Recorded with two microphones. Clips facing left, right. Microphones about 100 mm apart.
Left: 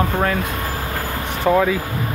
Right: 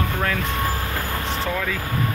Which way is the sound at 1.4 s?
40° left (ahead or behind).